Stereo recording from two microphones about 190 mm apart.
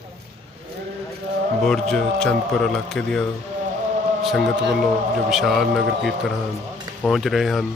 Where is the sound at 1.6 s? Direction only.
Centre (ahead or behind).